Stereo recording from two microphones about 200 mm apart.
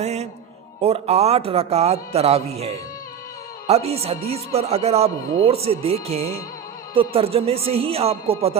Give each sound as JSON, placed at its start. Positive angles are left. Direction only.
{"t": 0.0, "sound": "music", "side_deg": -35}
{"t": 0.8, "sound": "speech", "side_deg": -30}